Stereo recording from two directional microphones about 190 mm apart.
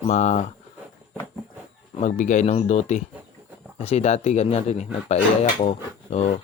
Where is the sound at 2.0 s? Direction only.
40° left (ahead or behind).